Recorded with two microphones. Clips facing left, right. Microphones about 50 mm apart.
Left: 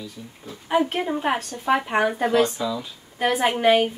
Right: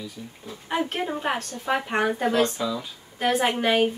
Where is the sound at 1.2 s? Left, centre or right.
Centre.